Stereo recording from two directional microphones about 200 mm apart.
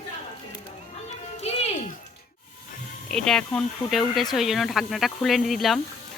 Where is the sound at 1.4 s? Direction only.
30° left (ahead or behind).